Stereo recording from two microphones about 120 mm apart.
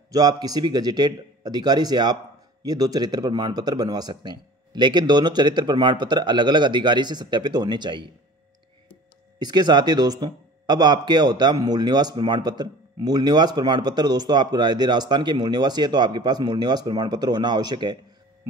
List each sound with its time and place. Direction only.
0.1 s speech: 35° right (ahead or behind)
9.4 s speech: 35° right (ahead or behind)